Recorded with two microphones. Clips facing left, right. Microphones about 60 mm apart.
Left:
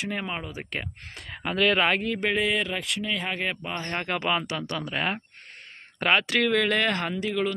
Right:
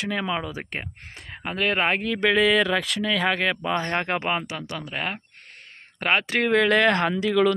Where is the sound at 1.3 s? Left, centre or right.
Centre.